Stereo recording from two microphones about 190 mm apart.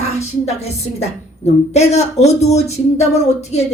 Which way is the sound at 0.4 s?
35° left (ahead or behind).